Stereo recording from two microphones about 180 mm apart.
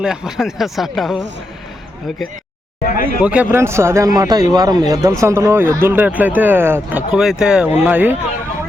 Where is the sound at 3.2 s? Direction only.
5° right (ahead or behind).